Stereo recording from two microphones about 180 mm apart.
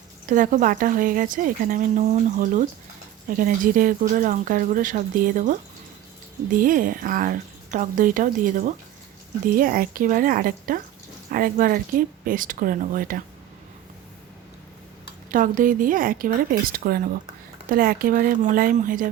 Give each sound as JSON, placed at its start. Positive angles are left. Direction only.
{"t": 0.3, "sound": "speech", "side_deg": -45}
{"t": 15.3, "sound": "speech", "side_deg": -50}